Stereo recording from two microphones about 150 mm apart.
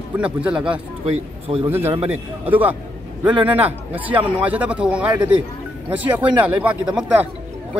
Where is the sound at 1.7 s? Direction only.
15° right (ahead or behind).